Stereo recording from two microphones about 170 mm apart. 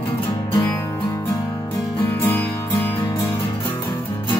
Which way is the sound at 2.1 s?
10° left (ahead or behind).